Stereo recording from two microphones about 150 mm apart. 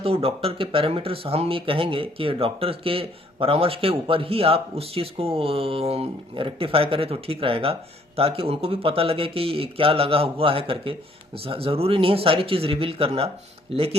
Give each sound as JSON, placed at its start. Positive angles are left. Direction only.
{"t": 0.0, "sound": "speech", "side_deg": -40}